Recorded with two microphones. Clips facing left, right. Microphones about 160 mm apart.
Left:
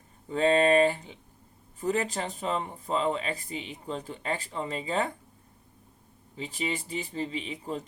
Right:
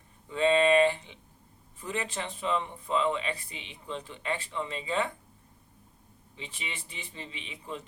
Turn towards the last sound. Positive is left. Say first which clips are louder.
# left 6 dB
turn(degrees=40)  # may be behind; listen again after turning